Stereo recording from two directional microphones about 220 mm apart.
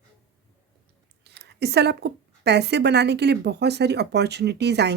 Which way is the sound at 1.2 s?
50° right (ahead or behind).